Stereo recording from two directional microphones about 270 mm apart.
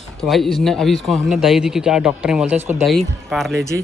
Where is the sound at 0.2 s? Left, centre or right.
Centre.